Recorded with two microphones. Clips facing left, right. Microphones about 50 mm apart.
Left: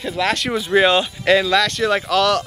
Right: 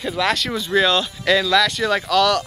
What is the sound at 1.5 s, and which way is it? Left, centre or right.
Speech, centre.